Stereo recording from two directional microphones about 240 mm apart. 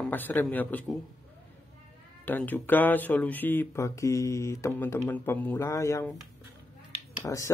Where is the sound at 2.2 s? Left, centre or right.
Centre.